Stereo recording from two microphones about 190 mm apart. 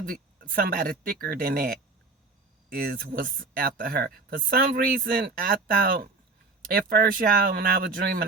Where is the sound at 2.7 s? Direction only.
55° right (ahead or behind).